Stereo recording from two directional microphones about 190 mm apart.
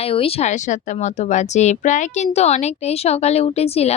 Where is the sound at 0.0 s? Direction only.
30° left (ahead or behind).